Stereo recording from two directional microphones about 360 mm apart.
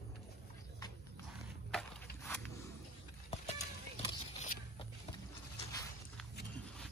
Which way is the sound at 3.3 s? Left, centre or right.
Centre.